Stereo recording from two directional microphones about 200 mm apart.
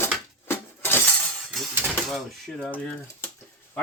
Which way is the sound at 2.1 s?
Centre (ahead or behind).